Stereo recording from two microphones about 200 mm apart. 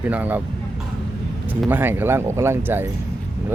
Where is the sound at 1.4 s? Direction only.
10° right (ahead or behind).